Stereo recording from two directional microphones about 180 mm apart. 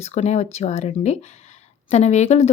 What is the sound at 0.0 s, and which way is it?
Speech, 40° left (ahead or behind).